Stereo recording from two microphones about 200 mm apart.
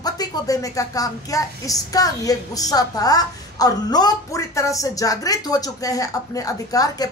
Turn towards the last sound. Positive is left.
turn(degrees=20)  # may be behind; listen again after turning